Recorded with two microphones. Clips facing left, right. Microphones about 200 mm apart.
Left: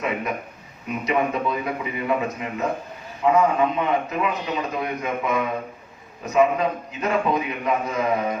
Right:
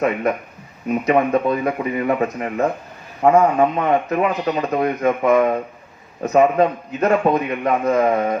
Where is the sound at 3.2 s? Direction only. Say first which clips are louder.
Right 5 dB; 50° right (ahead or behind).